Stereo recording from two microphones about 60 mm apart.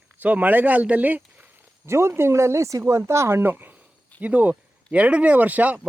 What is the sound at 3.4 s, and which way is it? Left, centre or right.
Speech, right.